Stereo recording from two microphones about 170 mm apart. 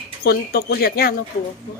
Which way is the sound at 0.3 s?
70° left (ahead or behind).